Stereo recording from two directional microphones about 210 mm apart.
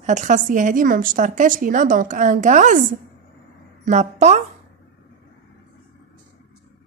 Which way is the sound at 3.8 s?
35° right (ahead or behind).